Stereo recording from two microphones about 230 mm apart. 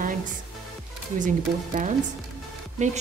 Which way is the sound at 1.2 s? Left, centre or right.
Right.